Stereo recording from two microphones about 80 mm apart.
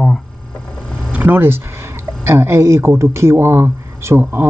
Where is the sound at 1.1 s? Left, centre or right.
Right.